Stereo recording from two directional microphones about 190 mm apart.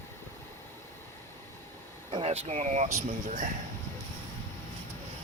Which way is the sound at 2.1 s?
30° right (ahead or behind).